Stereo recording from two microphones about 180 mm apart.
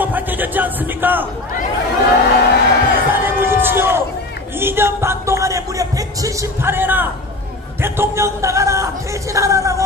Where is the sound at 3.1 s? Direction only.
10° right (ahead or behind).